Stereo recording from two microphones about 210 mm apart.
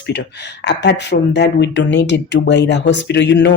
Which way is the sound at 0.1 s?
55° left (ahead or behind).